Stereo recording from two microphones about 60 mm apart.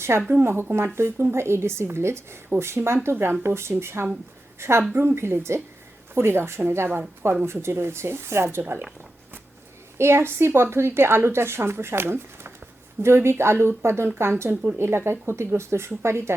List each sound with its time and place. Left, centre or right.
0.3 s a woman's voice: right
10.0 s a woman's voice: right
14.5 s speech: centre
14.8 s a woman's voice: right